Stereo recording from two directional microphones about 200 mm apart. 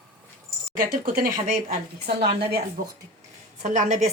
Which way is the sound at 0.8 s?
45° right (ahead or behind).